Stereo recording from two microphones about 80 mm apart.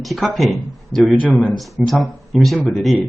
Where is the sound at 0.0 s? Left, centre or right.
Centre.